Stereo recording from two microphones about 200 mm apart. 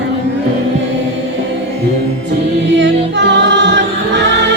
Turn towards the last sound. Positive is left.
turn(degrees=-65)  # may be behind; listen again after turning